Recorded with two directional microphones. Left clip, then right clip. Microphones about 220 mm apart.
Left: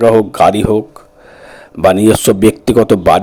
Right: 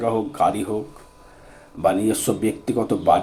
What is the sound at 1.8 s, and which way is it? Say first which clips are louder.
Speech: left 11 dB; 45° left (ahead or behind).